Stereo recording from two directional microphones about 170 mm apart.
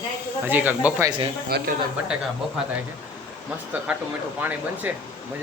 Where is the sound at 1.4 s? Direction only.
65° right (ahead or behind).